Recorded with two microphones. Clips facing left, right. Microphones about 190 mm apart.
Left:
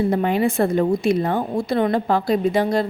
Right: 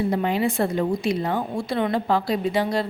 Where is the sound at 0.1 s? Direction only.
50° left (ahead or behind).